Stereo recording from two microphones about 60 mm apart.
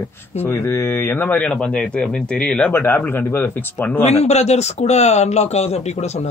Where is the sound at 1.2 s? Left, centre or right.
Left.